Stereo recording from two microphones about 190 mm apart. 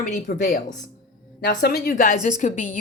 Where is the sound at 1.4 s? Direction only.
55° left (ahead or behind).